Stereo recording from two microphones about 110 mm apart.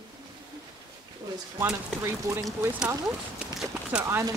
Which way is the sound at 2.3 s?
25° right (ahead or behind).